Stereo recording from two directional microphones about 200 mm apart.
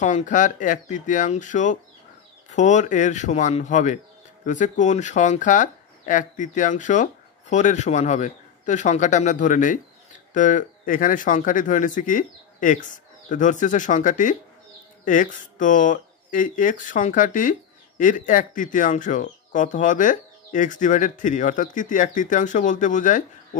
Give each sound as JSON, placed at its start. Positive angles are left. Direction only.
{"t": 0.0, "sound": "speech", "side_deg": 40}